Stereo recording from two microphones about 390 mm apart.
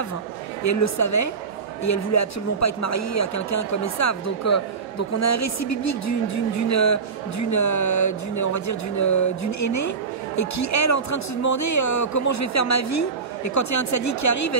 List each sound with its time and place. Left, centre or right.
0.7 s speech: left